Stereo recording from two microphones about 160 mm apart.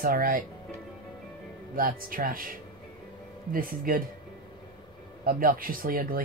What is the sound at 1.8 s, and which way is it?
Speech, 60° right (ahead or behind).